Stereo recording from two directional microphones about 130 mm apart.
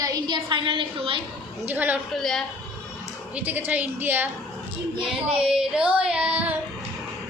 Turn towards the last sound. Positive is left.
turn(degrees=-10)  # may be behind; listen again after turning